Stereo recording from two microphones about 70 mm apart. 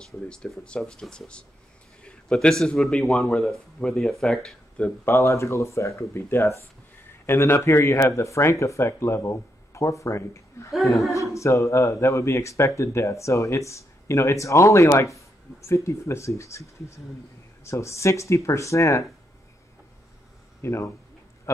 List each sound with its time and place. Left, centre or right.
0.0 s speech: centre
2.0 s a sound: centre
2.6 s speech: centre
5.2 s a man's voice: left
20.6 s a man's voice: left